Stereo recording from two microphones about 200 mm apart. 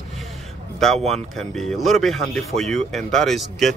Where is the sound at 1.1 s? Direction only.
Centre (ahead or behind).